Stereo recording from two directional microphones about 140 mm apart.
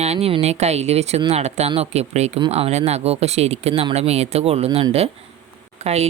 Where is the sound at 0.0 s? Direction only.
50° right (ahead or behind).